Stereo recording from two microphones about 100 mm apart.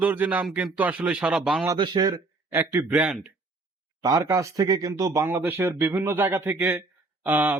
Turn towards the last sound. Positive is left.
turn(degrees=-20)  # may be behind; listen again after turning